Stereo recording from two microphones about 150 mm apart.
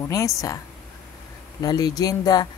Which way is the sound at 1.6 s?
25° left (ahead or behind).